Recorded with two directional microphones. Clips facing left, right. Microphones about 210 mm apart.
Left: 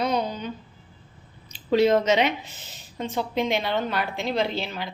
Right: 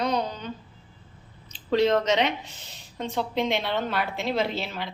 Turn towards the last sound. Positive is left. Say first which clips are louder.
# left 1 dB
turn(degrees=0)  # may be behind; listen again after turning